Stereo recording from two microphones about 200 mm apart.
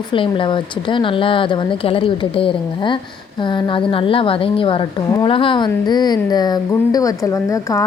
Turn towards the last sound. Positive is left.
turn(degrees=15)  # may be behind; listen again after turning